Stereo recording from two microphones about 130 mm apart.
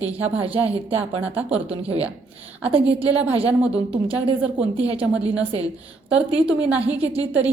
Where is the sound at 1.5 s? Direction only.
50° right (ahead or behind).